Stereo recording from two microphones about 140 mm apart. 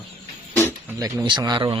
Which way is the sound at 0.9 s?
30° right (ahead or behind).